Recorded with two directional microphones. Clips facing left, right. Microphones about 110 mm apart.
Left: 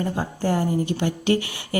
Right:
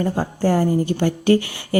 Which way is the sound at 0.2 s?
35° right (ahead or behind).